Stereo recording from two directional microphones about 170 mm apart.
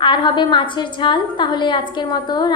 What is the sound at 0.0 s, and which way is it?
A woman's voice, 25° left (ahead or behind).